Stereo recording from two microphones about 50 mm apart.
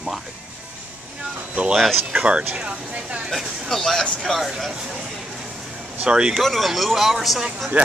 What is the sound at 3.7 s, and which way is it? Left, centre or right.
Speech, centre.